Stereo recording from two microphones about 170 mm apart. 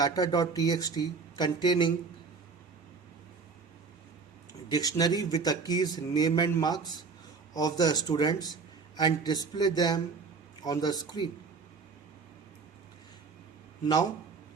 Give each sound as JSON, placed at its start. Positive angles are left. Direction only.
{"t": 0.0, "sound": "speech", "side_deg": 20}
{"t": 4.7, "sound": "speech", "side_deg": 20}